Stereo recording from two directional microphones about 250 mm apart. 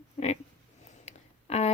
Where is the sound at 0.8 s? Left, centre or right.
Left.